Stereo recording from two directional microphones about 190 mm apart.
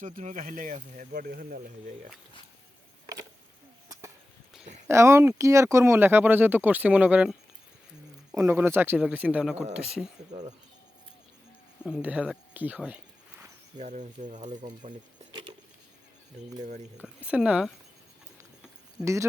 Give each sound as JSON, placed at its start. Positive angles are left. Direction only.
{"t": 0.0, "sound": "speech", "side_deg": -40}
{"t": 4.9, "sound": "speech", "side_deg": -15}
{"t": 11.9, "sound": "speech", "side_deg": -5}
{"t": 13.7, "sound": "speech", "side_deg": -40}
{"t": 15.3, "sound": "a sound", "side_deg": -25}
{"t": 17.2, "sound": "speech", "side_deg": -5}
{"t": 19.0, "sound": "speech", "side_deg": -15}